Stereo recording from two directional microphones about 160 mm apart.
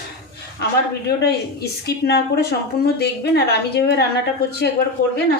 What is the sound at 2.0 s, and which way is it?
A woman's voice, 80° left.